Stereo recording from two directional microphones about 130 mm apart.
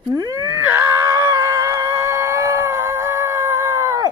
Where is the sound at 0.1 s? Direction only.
25° right (ahead or behind).